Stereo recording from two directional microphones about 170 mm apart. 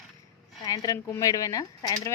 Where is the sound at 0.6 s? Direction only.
20° left (ahead or behind).